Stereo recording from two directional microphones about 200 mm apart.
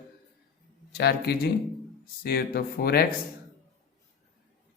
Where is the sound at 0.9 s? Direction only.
50° left (ahead or behind).